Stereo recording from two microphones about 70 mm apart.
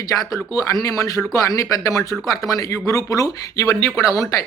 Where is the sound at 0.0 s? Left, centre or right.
Left.